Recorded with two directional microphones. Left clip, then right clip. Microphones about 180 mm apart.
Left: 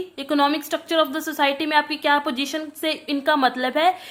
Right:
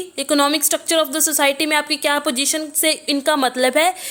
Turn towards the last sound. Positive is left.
turn(degrees=-35)  # may be behind; listen again after turning